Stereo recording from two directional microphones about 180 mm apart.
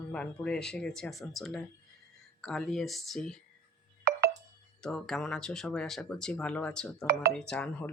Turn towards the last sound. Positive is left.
turn(degrees=5)  # may be behind; listen again after turning